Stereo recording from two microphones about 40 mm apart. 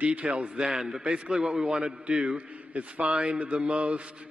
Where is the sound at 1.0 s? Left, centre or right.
Right.